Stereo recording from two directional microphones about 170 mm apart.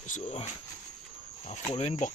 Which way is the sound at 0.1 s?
40° left (ahead or behind).